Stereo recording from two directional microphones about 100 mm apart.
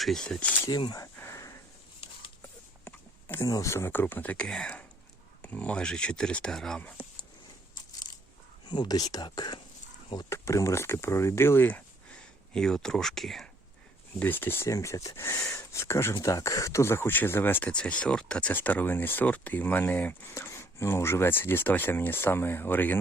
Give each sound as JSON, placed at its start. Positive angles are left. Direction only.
{"t": 0.0, "sound": "speech", "side_deg": 5}
{"t": 0.7, "sound": "speech", "side_deg": 40}
{"t": 1.0, "sound": "a sound", "side_deg": 25}
{"t": 2.8, "sound": "a sound", "side_deg": 25}
{"t": 3.5, "sound": "speech", "side_deg": 30}
{"t": 8.7, "sound": "speech", "side_deg": 45}
{"t": 10.2, "sound": "speech", "side_deg": 30}
{"t": 12.5, "sound": "speech", "side_deg": 5}
{"t": 14.2, "sound": "speech", "side_deg": 20}
{"t": 17.7, "sound": "speech", "side_deg": 10}